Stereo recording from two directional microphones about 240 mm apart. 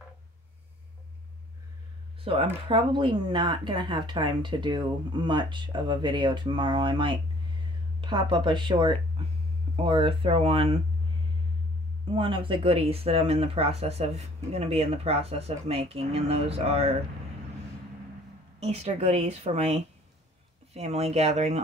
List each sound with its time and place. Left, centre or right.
2.3 s speech: right
12.1 s speech: right
18.6 s speech: right